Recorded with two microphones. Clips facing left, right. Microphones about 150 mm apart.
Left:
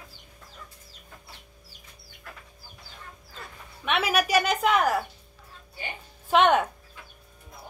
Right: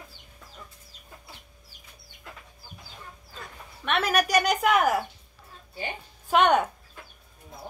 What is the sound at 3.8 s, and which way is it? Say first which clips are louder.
Speech: even; 5° left (ahead or behind).